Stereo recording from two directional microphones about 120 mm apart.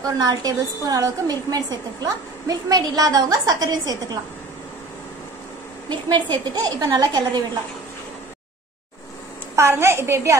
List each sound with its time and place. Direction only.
0.0 s a woman's voice: 30° right (ahead or behind)
5.9 s a woman's voice: 40° right (ahead or behind)
9.6 s a child's voice: 20° right (ahead or behind)